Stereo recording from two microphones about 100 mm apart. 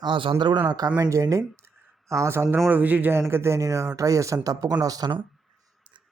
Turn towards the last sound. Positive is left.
turn(degrees=-45)  # may be behind; listen again after turning